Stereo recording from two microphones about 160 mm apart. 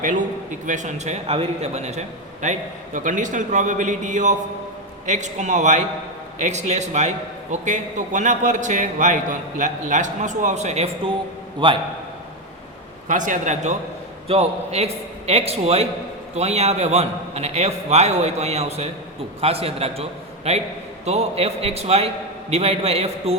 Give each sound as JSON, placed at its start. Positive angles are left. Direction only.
{"t": 0.6, "sound": "a man's voice", "side_deg": -50}
{"t": 11.6, "sound": "a man's voice", "side_deg": -30}
{"t": 13.1, "sound": "a man's voice", "side_deg": -50}